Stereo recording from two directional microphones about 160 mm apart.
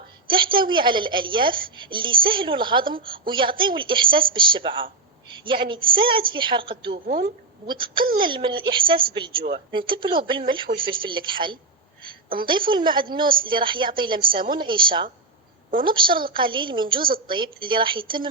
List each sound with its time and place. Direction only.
0.3 s a woman's voice: 30° right (ahead or behind)
6.9 s speech: 65° right (ahead or behind)
7.7 s a woman's voice: 30° right (ahead or behind)